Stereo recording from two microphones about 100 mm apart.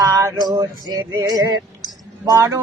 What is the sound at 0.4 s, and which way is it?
Music, 40° right (ahead or behind).